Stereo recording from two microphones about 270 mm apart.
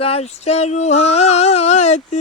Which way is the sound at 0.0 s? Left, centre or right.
Left.